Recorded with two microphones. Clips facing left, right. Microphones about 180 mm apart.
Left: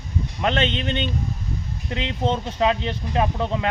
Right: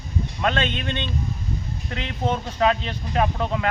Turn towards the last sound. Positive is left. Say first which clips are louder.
# even
turn(degrees=25)  # may be behind; listen again after turning